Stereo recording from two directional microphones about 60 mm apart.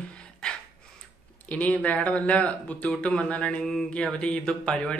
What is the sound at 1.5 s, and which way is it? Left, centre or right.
A man's voice, left.